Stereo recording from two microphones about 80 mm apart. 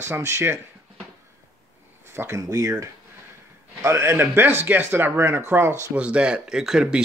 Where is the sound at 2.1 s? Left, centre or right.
Right.